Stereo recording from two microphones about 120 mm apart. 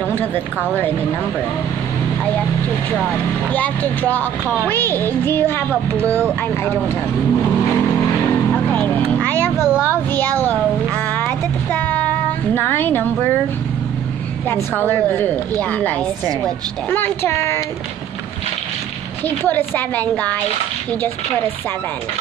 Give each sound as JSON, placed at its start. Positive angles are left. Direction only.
{"t": 0.2, "sound": "speech", "side_deg": 15}
{"t": 3.5, "sound": "speech", "side_deg": 15}
{"t": 8.6, "sound": "vehicle", "side_deg": 15}
{"t": 9.8, "sound": "speech", "side_deg": 15}
{"t": 11.1, "sound": "music", "side_deg": 15}
{"t": 12.5, "sound": "speech", "side_deg": 15}
{"t": 14.5, "sound": "a woman's voice", "side_deg": 15}
{"t": 19.2, "sound": "speech", "side_deg": 15}